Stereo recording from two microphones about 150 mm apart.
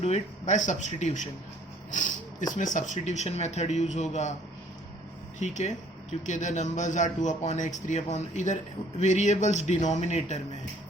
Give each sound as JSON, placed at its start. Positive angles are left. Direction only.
{"t": 0.0, "sound": "speech", "side_deg": 50}
{"t": 5.4, "sound": "speech", "side_deg": 50}